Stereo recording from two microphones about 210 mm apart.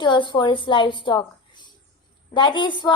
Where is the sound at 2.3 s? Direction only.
20° left (ahead or behind).